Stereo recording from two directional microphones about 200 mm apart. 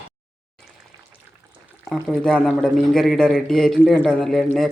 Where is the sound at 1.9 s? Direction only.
Centre (ahead or behind).